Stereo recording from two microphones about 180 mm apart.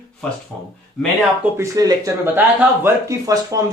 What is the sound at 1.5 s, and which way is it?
Speech, 20° right (ahead or behind).